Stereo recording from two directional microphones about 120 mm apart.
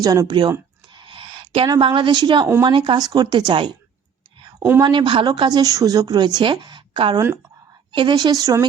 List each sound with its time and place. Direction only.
0.0 s speech: 30° right (ahead or behind)
0.9 s a woman's voice: 45° right (ahead or behind)
4.8 s a woman's voice: 40° right (ahead or behind)